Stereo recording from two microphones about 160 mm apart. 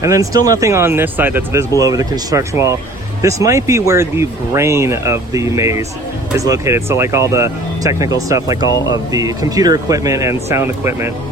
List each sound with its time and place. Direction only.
0.0 s speech: 20° right (ahead or behind)